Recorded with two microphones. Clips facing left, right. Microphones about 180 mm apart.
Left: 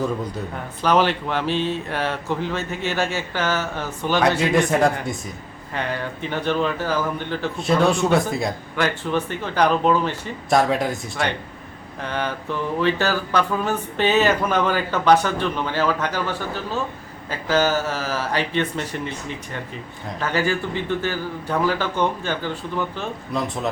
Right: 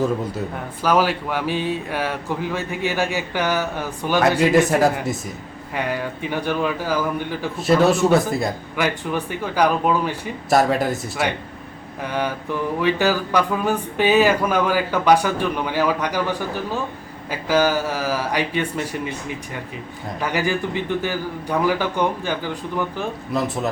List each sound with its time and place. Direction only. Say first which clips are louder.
0.8 s speech: even; 10° right (ahead or behind)
20.1 s speech: even; 15° right (ahead or behind)